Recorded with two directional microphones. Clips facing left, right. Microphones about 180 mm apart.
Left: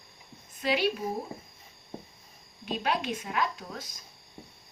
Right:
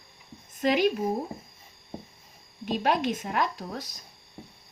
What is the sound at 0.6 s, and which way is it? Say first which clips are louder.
Speech: right 5 dB; 45° right (ahead or behind).